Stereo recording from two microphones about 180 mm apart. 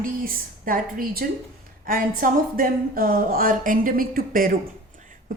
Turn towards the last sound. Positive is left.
turn(degrees=-50)  # may be behind; listen again after turning